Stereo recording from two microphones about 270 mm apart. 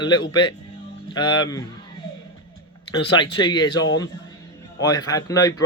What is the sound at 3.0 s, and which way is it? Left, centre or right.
Speech, centre.